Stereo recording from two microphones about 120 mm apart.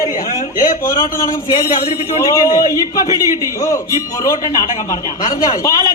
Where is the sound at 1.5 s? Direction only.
30° left (ahead or behind).